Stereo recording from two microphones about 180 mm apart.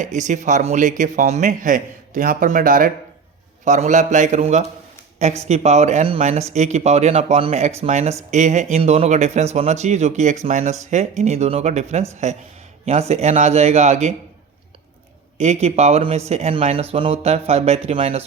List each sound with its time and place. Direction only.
0.0 s a man's voice: 40° right (ahead or behind)
15.4 s speech: 40° right (ahead or behind)